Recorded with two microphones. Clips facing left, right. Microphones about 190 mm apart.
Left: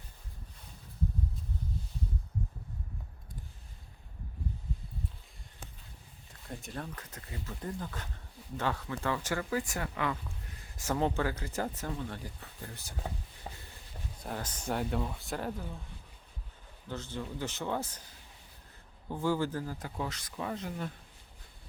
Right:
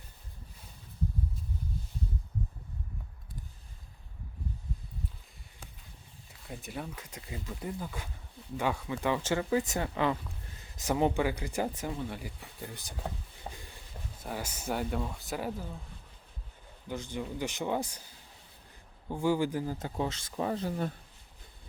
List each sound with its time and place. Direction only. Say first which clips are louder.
6.5 s speech: right 1 dB; 5° right (ahead or behind); by 10.2 s 25° right (ahead or behind)
10.8 s speech: right 3 dB; 15° right (ahead or behind)
13.5 s a sound: right 2 dB; 5° right (ahead or behind)
14.2 s speech: right 1 dB; 5° right (ahead or behind)
16.9 s speech: right 2 dB; 15° right (ahead or behind)
19.1 s speech: right 2 dB; 15° right (ahead or behind); by 20.9 s 35° right (ahead or behind)